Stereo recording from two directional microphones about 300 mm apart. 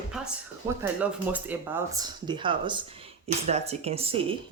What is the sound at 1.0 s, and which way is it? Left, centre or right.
Speech, centre.